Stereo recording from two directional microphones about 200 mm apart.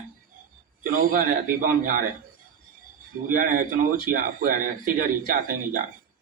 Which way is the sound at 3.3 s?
45° right (ahead or behind).